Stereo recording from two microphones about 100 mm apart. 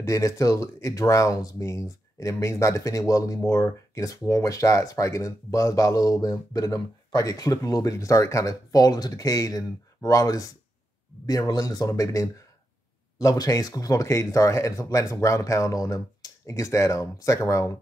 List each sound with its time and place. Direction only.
0.0 s speech: 30° left (ahead or behind)